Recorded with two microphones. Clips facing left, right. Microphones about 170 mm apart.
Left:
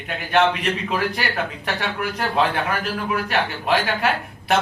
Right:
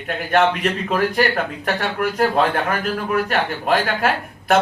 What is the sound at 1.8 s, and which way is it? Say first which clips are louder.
A man's voice: right 7 dB; 50° right (ahead or behind).